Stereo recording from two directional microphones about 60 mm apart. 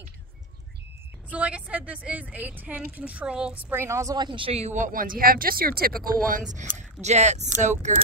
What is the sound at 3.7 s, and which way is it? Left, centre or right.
Speech, right.